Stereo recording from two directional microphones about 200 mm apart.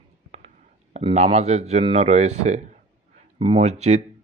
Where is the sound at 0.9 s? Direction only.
35° right (ahead or behind).